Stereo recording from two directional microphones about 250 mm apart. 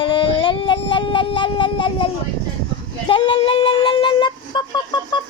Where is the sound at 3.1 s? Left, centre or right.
Left.